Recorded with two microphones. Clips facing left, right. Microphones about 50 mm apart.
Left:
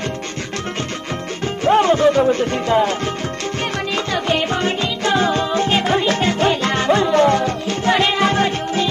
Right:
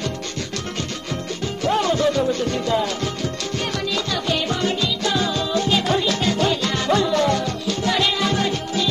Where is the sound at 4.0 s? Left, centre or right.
Left.